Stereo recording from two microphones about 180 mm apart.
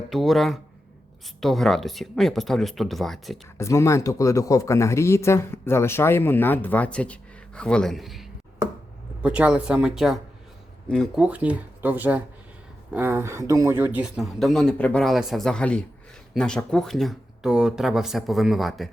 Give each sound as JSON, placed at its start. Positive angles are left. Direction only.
{"t": 0.1, "sound": "speech", "side_deg": 0}
{"t": 3.6, "sound": "speech", "side_deg": 15}